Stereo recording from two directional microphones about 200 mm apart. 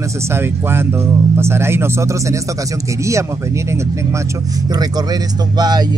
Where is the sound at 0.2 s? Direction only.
10° right (ahead or behind).